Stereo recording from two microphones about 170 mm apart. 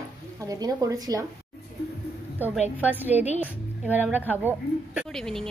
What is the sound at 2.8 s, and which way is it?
A woman's voice, 10° right (ahead or behind).